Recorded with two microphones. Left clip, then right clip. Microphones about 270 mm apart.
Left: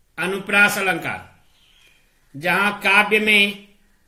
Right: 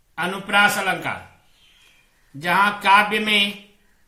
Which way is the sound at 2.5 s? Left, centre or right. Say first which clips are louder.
Right 2 dB; centre.